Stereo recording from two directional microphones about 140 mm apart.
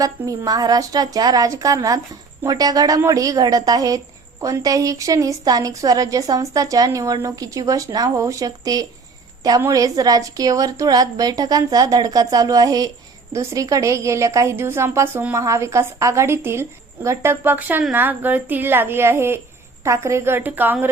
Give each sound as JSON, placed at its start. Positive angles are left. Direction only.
{"t": 0.0, "sound": "a woman's voice", "side_deg": -25}